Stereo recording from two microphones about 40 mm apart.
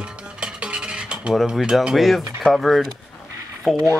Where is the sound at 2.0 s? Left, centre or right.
Centre.